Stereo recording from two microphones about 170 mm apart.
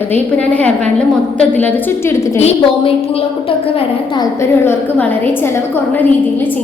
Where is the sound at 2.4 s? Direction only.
35° left (ahead or behind).